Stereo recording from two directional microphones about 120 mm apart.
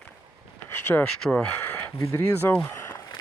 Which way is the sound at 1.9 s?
25° left (ahead or behind).